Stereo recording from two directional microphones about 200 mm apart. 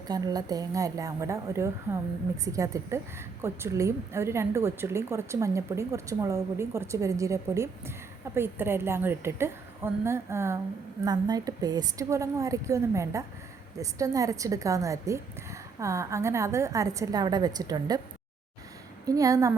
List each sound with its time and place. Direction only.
0.1 s a woman's voice: 20° right (ahead or behind)
19.0 s a woman's voice: 15° right (ahead or behind)